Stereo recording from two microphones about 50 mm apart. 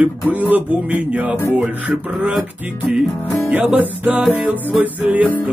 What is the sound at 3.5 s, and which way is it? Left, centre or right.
Music, right.